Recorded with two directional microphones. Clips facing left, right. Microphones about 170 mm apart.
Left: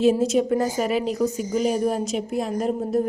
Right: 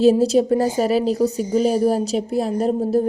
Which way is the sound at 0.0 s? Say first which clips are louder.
Right 4 dB; 35° right (ahead or behind).